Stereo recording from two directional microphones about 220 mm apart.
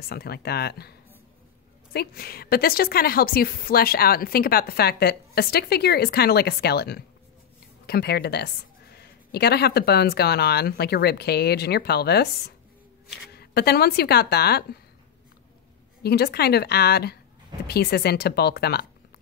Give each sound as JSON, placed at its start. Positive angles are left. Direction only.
{"t": 0.1, "sound": "a woman's voice", "side_deg": 45}
{"t": 2.0, "sound": "a woman's voice", "side_deg": 45}
{"t": 16.0, "sound": "a woman's voice", "side_deg": 45}